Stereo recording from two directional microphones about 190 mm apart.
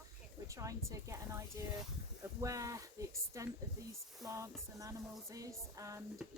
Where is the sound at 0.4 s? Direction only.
15° right (ahead or behind).